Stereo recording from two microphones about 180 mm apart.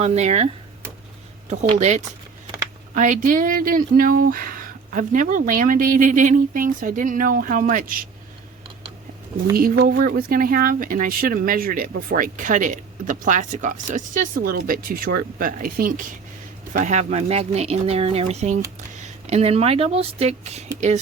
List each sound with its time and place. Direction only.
0.0 s speech: 40° right (ahead or behind)
2.9 s speech: 45° right (ahead or behind)
9.6 s speech: 55° right (ahead or behind); by 20.7 s 40° right (ahead or behind)